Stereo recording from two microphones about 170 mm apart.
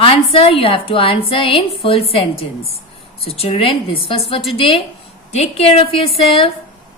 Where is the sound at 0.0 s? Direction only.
35° left (ahead or behind).